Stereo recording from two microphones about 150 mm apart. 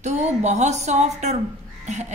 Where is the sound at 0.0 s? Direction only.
50° right (ahead or behind).